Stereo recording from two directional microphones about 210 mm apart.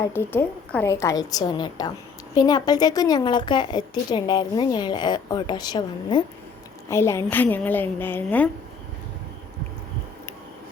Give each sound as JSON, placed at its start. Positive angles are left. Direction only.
{"t": 0.0, "sound": "a woman's voice", "side_deg": 10}